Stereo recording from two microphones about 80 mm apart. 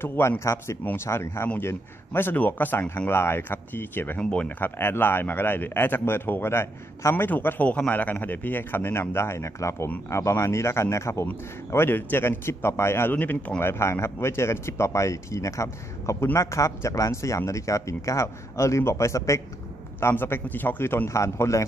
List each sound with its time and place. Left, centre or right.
0.0 s speech: left
4.2 s speech: centre; by 7.2 s left
7.2 s speech: left
13.6 s speech: left